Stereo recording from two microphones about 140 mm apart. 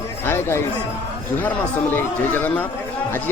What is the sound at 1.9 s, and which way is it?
Speech, 15° left (ahead or behind).